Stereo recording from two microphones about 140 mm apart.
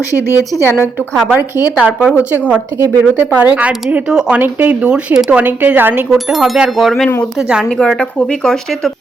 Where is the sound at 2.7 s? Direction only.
15° right (ahead or behind).